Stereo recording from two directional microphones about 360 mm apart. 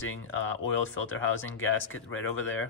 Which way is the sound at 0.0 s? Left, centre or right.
Left.